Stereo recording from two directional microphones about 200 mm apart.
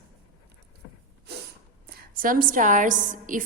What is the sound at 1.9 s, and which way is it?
A woman's voice, 50° right (ahead or behind).